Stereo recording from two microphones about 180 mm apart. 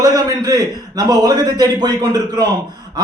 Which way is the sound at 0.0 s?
20° right (ahead or behind).